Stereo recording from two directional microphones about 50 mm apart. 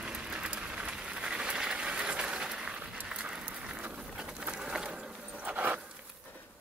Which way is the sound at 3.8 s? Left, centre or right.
Right.